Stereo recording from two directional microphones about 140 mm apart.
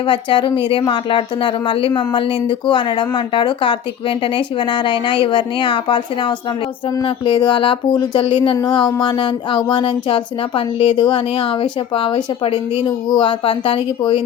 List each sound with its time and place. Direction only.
0.0 s speech: 35° left (ahead or behind)